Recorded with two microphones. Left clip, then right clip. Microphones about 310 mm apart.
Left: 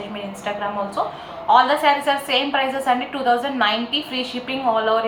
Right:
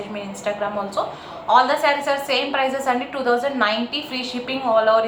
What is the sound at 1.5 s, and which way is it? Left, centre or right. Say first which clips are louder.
A woman's voice: left 1 dB; centre.